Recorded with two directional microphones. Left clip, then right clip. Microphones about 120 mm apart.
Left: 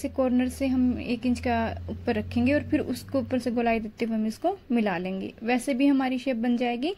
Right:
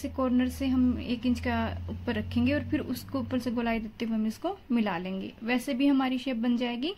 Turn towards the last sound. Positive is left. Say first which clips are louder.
# left 4 dB
turn(degrees=20)  # may be behind; listen again after turning